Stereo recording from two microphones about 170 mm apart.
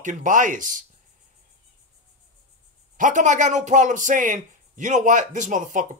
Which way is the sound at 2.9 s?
50° right (ahead or behind).